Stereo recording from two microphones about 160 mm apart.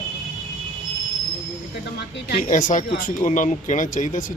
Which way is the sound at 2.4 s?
55° left (ahead or behind).